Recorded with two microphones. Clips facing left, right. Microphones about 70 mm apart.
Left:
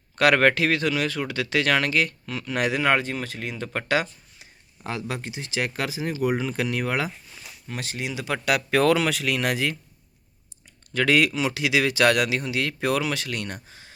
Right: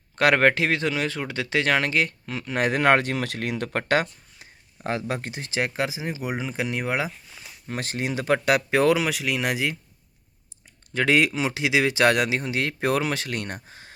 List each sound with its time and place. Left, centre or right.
0.2 s a man's voice: right
2.7 s speech: right; by 7.1 s centre
7.7 s speech: right
8.7 s speech: centre
10.9 s a man's voice: right